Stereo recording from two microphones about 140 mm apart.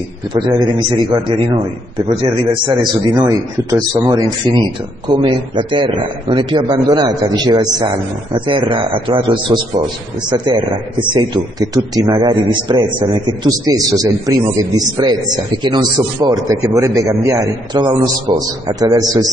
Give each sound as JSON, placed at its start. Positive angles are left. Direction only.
{"t": 0.3, "sound": "a man's voice", "side_deg": -30}